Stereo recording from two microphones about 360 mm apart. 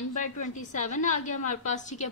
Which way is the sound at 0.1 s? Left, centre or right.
Centre.